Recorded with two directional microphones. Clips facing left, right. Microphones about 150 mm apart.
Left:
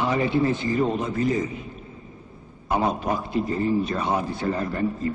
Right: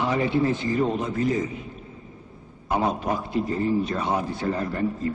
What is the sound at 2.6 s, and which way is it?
A man's voice, 15° left (ahead or behind).